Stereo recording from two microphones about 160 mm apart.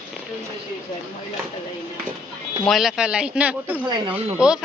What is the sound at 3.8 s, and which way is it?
Speech, 30° right (ahead or behind).